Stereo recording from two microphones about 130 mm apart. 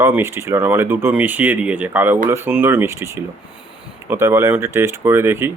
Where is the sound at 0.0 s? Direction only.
20° right (ahead or behind).